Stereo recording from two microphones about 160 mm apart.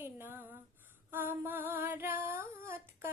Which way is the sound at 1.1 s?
15° right (ahead or behind).